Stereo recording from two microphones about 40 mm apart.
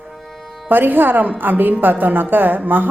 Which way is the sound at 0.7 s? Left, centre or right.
Right.